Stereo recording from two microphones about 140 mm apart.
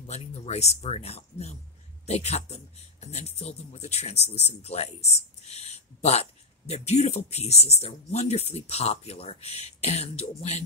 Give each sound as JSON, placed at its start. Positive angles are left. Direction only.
{"t": 0.0, "sound": "speech", "side_deg": 50}